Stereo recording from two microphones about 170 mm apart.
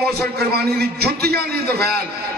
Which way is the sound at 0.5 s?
70° right (ahead or behind).